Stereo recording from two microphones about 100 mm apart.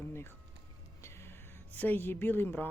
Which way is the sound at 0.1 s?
25° left (ahead or behind).